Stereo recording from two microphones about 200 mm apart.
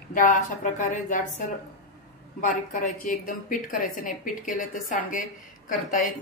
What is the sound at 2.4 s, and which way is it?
A woman's voice, 40° left (ahead or behind).